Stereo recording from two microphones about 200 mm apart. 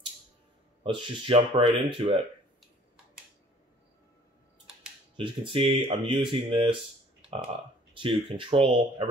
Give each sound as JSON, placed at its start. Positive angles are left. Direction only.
{"t": 0.8, "sound": "speech", "side_deg": -25}
{"t": 5.1, "sound": "speech", "side_deg": -25}
{"t": 7.9, "sound": "speech", "side_deg": -25}